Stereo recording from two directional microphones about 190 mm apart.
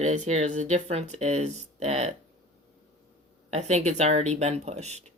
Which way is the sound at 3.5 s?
35° right (ahead or behind).